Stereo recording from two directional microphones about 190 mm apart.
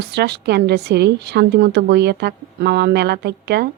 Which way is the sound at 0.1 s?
60° right (ahead or behind).